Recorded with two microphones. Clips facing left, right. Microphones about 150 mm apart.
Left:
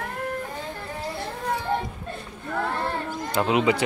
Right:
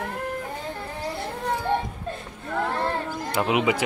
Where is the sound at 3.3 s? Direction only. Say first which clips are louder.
Left 1 dB; 10° right (ahead or behind).